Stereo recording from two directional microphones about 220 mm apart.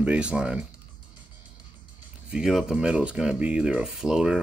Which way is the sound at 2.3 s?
Centre (ahead or behind).